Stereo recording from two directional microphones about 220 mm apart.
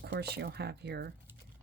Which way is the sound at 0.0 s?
50° right (ahead or behind).